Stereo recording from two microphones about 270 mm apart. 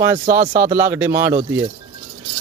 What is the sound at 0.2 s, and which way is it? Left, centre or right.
Speech, right.